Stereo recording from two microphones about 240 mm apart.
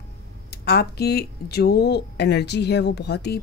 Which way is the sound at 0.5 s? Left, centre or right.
Left.